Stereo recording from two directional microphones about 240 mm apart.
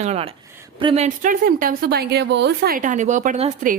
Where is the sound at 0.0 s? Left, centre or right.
Right.